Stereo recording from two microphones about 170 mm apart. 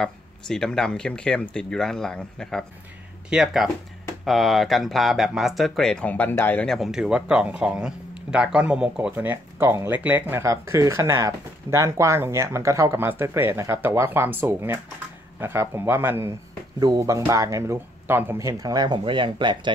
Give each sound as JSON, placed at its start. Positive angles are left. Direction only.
{"t": 0.0, "sound": "speech", "side_deg": 5}